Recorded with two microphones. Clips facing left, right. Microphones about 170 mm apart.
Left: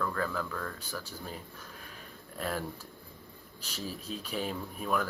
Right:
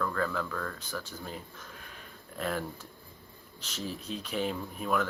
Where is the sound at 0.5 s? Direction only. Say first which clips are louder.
Right 2 dB; 25° left (ahead or behind).